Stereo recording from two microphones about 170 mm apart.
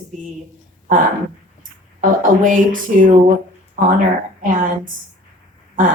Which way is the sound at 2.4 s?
50° right (ahead or behind).